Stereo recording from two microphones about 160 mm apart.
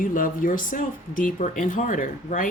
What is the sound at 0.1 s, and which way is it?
Speech, 55° left (ahead or behind).